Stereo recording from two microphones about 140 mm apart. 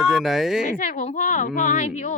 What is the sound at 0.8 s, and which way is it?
Speech, 65° left (ahead or behind).